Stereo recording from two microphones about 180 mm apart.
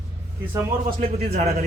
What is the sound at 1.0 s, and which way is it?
Speech, 45° right (ahead or behind).